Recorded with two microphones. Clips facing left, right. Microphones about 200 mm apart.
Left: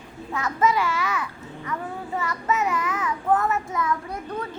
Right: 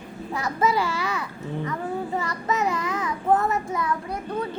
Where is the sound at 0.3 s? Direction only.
35° right (ahead or behind).